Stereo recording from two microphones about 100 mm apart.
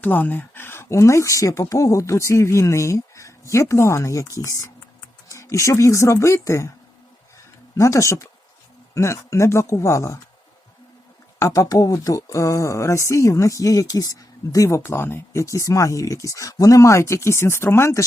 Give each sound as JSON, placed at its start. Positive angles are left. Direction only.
{"t": 0.0, "sound": "speech", "side_deg": 15}
{"t": 7.8, "sound": "speech", "side_deg": 30}
{"t": 11.3, "sound": "speech", "side_deg": 30}